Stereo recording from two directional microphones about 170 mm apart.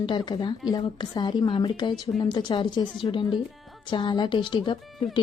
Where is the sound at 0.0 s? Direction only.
25° left (ahead or behind).